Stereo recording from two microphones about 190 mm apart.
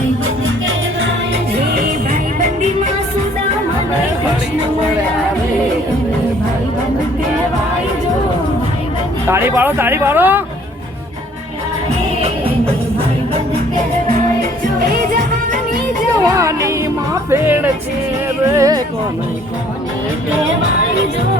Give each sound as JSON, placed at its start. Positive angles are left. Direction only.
{"t": 9.2, "sound": "speech", "side_deg": -10}
{"t": 16.1, "sound": "music", "side_deg": -15}
{"t": 18.5, "sound": "speech", "side_deg": -15}